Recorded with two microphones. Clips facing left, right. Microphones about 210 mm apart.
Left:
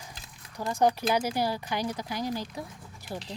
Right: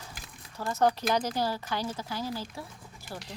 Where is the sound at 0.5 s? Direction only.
15° left (ahead or behind).